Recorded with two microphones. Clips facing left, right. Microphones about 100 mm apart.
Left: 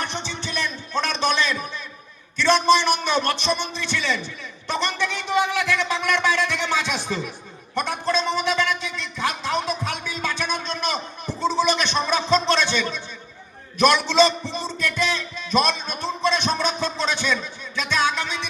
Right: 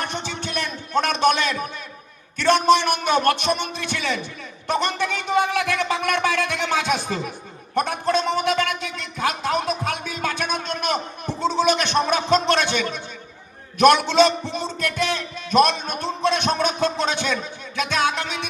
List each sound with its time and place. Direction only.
0.0 s music: 45° right (ahead or behind)
2.4 s a man's voice: 50° right (ahead or behind)